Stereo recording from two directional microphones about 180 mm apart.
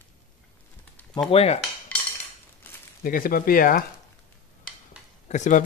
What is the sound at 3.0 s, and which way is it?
Speech, 50° left (ahead or behind).